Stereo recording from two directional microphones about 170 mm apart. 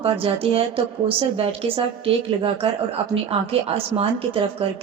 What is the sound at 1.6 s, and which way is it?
Speech, 30° right (ahead or behind).